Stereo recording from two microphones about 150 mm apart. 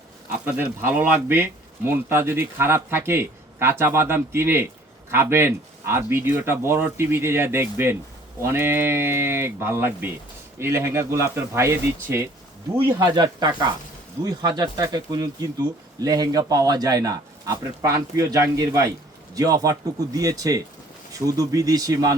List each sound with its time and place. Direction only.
0.4 s speech: 15° right (ahead or behind)